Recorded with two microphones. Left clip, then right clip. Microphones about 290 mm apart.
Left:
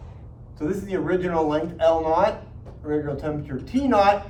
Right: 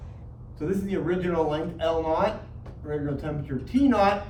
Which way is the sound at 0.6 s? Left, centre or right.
Centre.